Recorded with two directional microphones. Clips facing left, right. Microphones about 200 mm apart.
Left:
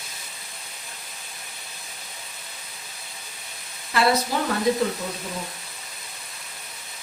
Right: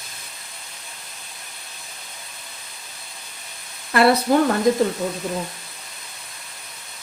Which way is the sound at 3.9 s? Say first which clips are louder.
Right 6 dB; 55° right (ahead or behind).